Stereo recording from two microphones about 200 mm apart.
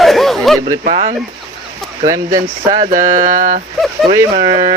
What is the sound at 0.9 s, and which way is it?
Speech, 35° right (ahead or behind).